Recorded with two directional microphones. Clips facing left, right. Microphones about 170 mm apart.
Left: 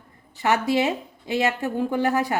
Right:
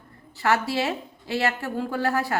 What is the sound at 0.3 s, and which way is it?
A woman's voice, 20° left (ahead or behind).